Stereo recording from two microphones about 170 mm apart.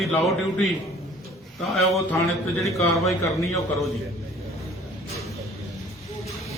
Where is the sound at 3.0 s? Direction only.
Centre (ahead or behind).